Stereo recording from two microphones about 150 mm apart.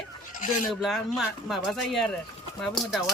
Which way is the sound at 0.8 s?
Centre (ahead or behind).